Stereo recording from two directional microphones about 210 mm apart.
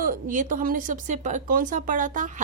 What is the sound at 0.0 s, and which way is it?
A woman's voice, 40° right (ahead or behind).